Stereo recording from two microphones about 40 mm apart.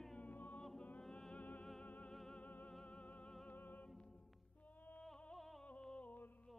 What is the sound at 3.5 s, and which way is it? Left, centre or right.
Music, left.